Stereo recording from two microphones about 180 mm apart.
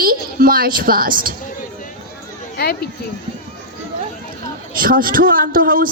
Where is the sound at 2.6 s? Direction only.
60° left (ahead or behind).